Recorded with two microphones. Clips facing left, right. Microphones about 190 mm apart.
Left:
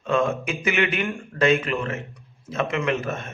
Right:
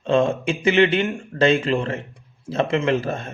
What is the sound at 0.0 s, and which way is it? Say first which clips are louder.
A man's voice: right 4 dB; 30° right (ahead or behind).